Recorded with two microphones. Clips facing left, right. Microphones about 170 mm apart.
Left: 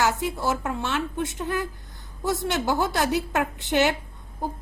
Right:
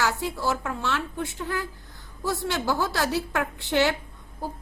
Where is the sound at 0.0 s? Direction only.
20° left (ahead or behind).